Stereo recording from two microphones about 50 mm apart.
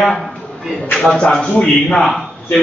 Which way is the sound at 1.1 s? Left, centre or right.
Centre.